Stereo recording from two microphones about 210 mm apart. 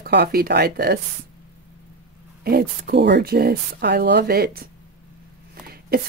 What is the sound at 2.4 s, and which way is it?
Speech, 45° right (ahead or behind).